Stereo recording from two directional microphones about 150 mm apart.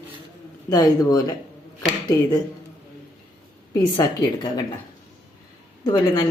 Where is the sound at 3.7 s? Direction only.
25° left (ahead or behind).